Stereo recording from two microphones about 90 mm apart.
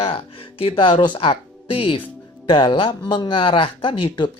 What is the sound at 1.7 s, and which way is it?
Speech, 90° left.